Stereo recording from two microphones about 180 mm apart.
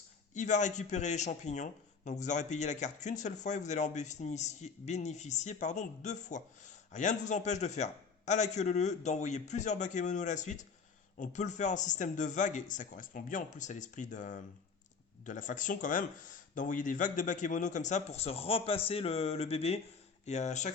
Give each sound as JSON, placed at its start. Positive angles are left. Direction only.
{"t": 0.3, "sound": "a man's voice", "side_deg": 40}